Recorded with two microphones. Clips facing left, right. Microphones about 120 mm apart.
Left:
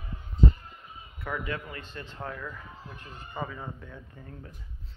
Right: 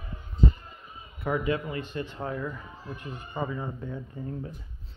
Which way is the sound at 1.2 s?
20° right (ahead or behind).